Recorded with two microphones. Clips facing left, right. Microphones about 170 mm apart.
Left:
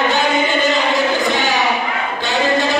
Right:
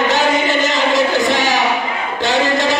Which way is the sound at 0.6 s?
90° right.